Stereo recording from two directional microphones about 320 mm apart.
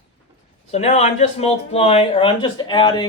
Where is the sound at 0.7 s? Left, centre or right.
Centre.